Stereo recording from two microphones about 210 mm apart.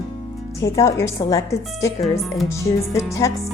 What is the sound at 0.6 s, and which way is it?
Speech, 15° left (ahead or behind).